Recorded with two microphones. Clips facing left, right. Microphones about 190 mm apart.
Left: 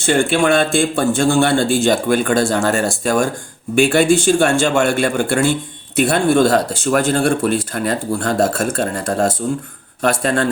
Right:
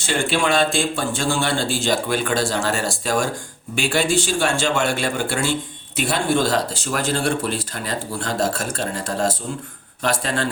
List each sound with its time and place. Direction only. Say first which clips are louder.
0.0 s speech: left 6 dB; 50° left (ahead or behind)